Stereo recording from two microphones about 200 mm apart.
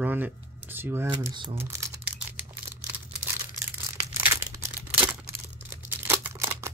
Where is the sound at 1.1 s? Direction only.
20° right (ahead or behind).